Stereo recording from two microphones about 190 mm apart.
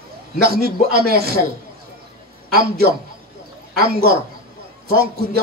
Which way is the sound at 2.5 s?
55° right (ahead or behind).